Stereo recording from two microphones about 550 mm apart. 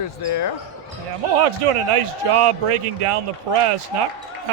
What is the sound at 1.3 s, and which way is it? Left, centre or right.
A man's voice, right.